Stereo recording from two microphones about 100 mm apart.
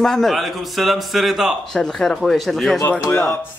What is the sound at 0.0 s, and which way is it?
A man's voice, centre (ahead or behind).